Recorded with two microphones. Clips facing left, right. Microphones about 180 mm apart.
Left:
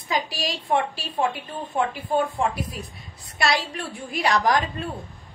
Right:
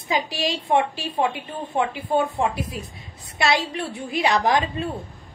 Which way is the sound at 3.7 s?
20° right (ahead or behind).